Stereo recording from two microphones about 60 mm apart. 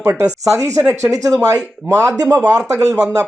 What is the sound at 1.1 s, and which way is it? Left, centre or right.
Speech, right.